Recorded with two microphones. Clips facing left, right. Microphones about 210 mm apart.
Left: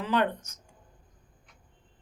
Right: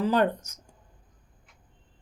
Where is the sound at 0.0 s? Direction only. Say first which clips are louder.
Right 4 dB; 40° right (ahead or behind).